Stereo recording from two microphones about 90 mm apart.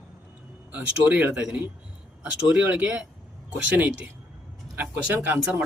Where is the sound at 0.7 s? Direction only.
15° right (ahead or behind).